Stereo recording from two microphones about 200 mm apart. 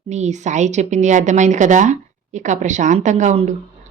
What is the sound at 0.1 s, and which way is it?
A woman's voice, 35° right (ahead or behind).